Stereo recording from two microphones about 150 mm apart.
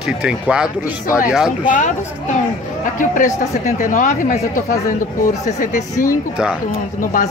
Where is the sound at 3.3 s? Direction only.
60° left (ahead or behind).